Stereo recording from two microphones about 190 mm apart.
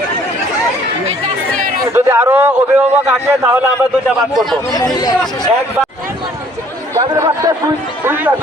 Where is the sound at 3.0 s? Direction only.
10° right (ahead or behind).